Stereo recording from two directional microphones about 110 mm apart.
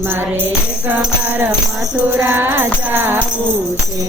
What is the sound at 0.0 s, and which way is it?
Music, 20° right (ahead or behind).